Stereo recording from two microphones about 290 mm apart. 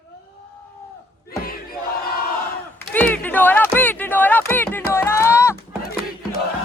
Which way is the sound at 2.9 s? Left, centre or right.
Centre.